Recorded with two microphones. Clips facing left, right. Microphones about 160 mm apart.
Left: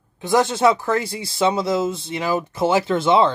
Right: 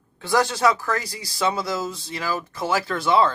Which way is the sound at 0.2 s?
20° left (ahead or behind).